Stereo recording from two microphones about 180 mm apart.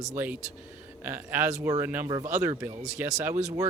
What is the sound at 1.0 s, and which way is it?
Speech, 10° right (ahead or behind).